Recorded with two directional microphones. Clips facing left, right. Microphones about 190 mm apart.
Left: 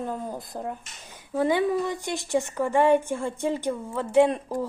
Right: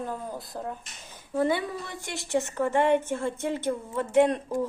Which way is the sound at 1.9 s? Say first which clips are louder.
Left 4 dB; 15° left (ahead or behind).